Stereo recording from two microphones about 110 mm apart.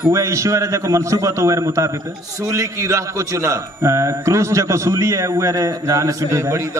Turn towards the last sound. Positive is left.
turn(degrees=-25)  # may be behind; listen again after turning